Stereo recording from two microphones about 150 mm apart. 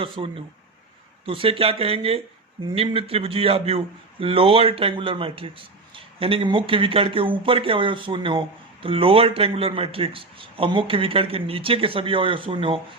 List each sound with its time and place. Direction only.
0.0 s speech: 35° right (ahead or behind)